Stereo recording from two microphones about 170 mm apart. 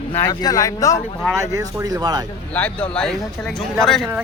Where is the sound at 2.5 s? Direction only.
5° left (ahead or behind).